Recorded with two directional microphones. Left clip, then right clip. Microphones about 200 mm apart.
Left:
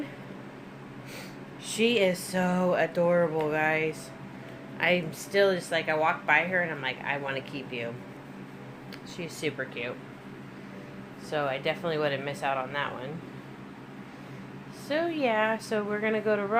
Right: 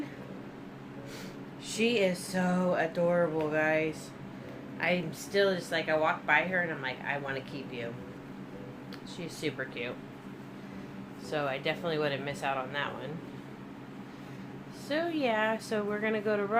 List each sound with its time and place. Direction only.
1.6 s speech: 40° left (ahead or behind)
9.1 s speech: 35° left (ahead or behind)
11.3 s speech: 25° left (ahead or behind)
14.8 s speech: 25° left (ahead or behind)